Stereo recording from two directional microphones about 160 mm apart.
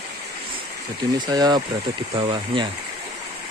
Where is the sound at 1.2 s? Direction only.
25° right (ahead or behind).